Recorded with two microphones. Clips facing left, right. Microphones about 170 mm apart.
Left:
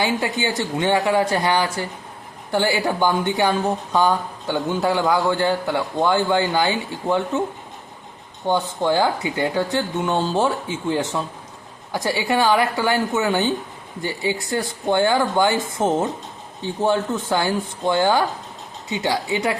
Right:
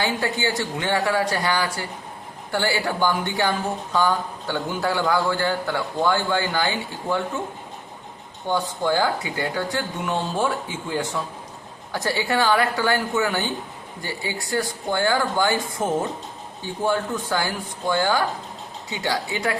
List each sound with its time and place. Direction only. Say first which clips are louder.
0.2 s a man's voice: left 1 dB; 20° left (ahead or behind)
8.4 s a man's voice: left 3 dB; 20° left (ahead or behind)
11.9 s a woman's voice: left 2 dB; 15° left (ahead or behind)